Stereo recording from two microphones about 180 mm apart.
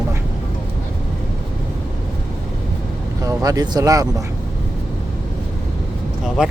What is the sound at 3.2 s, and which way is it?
Speech, 20° right (ahead or behind).